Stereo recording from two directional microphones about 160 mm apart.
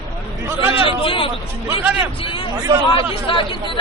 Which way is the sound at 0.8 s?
35° left (ahead or behind).